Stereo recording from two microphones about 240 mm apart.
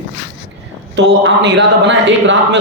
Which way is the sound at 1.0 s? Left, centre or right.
Right.